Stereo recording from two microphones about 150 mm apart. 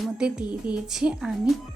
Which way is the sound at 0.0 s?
5° right (ahead or behind).